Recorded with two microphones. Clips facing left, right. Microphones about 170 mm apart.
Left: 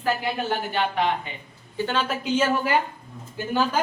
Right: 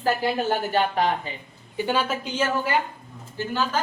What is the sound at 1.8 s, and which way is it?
Speech, 10° right (ahead or behind).